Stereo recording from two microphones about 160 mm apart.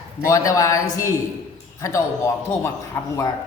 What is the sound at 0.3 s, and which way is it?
A man's voice, 20° left (ahead or behind).